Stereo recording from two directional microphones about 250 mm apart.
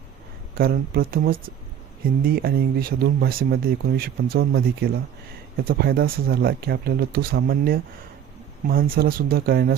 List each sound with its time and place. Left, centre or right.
0.5 s speech: right